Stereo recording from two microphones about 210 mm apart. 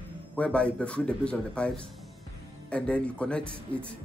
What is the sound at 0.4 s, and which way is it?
A man's voice, 5° left (ahead or behind).